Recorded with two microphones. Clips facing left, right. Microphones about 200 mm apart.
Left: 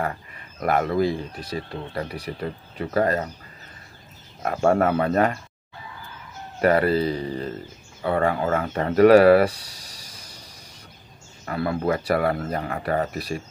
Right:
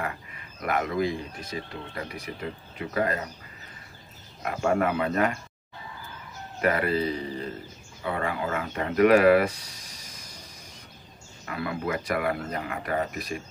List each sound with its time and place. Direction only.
0.0 s speech: 40° left (ahead or behind)
4.4 s speech: 40° left (ahead or behind)
6.6 s speech: 35° left (ahead or behind)